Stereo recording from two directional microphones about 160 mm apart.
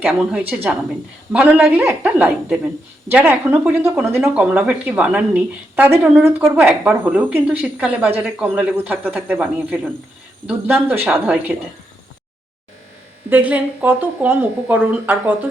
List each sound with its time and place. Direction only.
0.0 s speech: 5° right (ahead or behind)
13.3 s speech: 10° right (ahead or behind)